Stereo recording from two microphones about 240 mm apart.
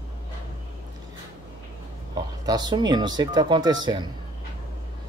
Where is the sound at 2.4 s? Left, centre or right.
Centre.